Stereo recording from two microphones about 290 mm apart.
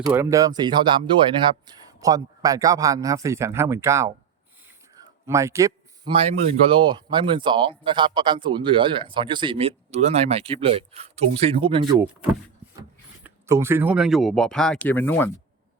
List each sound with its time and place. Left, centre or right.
0.1 s a man's voice: centre
13.2 s speech: centre